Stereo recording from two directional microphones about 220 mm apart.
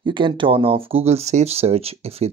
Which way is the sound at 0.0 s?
20° right (ahead or behind).